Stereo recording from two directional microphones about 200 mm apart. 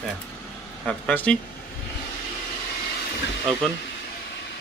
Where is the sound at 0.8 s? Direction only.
5° left (ahead or behind).